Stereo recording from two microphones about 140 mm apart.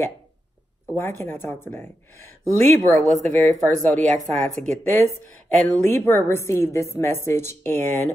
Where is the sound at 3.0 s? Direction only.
60° right (ahead or behind).